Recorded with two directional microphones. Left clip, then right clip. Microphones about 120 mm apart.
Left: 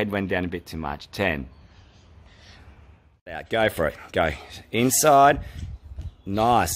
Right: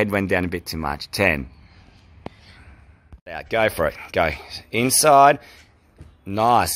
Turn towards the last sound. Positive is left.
turn(degrees=30)  # may be behind; listen again after turning